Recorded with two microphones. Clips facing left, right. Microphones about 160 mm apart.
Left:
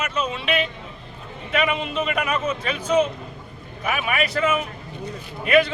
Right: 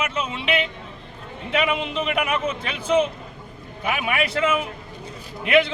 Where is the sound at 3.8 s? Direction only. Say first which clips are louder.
Even; 25° right (ahead or behind).